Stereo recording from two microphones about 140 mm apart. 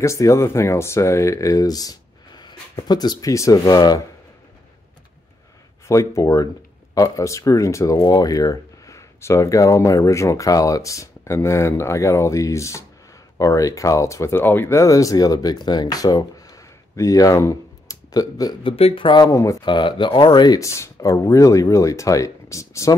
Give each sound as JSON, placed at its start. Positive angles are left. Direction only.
{"t": 0.0, "sound": "speech", "side_deg": 20}
{"t": 5.9, "sound": "speech", "side_deg": 20}